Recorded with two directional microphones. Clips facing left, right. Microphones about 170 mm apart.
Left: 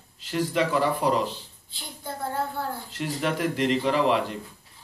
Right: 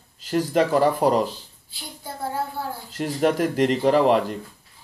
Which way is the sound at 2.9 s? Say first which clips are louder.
Right 9 dB; 45° right (ahead or behind).